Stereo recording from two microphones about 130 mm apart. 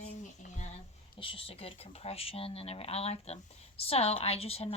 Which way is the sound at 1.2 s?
45° left (ahead or behind).